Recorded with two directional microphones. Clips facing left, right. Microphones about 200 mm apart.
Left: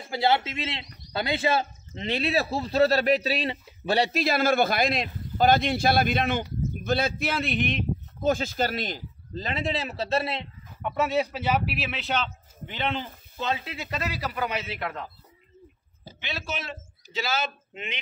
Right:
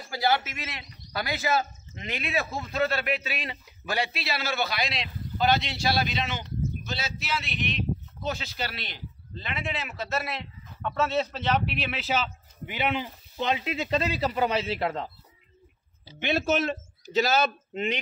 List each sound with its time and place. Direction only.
0.0 s a man's voice: 25° left (ahead or behind)
10.8 s speech: 15° left (ahead or behind); by 15.0 s 30° right (ahead or behind)
16.2 s a man's voice: 50° right (ahead or behind)